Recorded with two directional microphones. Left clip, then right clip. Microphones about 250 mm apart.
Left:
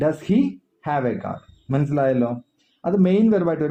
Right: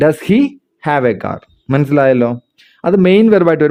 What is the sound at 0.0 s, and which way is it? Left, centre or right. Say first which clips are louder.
Speech: right 9 dB; right.